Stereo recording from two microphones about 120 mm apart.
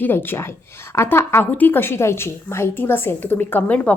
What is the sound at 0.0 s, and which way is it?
A woman's voice, 15° left (ahead or behind).